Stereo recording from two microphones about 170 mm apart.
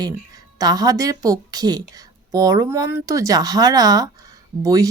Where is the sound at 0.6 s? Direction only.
20° right (ahead or behind).